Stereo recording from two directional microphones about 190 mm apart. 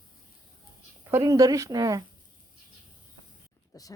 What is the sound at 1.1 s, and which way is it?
Speech, 20° right (ahead or behind).